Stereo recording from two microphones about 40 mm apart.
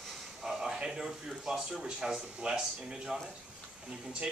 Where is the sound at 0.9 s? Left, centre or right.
Centre.